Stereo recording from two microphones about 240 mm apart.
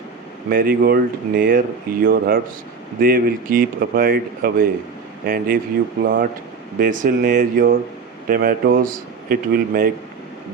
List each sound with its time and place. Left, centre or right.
0.5 s speech: right
6.7 s speech: right